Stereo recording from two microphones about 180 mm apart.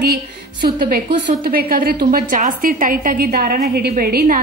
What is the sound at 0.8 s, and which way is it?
A woman's voice, 55° right (ahead or behind).